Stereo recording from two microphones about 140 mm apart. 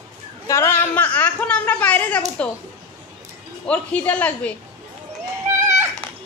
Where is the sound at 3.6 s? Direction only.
10° left (ahead or behind).